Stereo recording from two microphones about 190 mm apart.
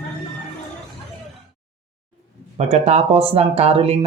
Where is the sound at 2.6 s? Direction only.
35° right (ahead or behind).